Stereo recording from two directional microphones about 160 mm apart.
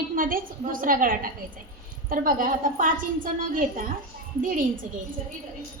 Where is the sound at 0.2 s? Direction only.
60° right (ahead or behind).